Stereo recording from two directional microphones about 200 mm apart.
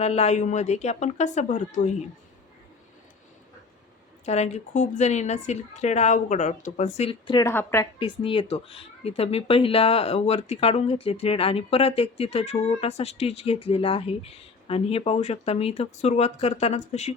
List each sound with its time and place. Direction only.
0.0 s speech: 35° left (ahead or behind)
4.3 s speech: 35° left (ahead or behind)
7.4 s a woman's voice: 15° left (ahead or behind)
7.9 s speech: 25° left (ahead or behind)